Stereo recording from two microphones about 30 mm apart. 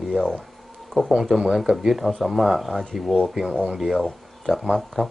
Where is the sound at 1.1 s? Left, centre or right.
Centre.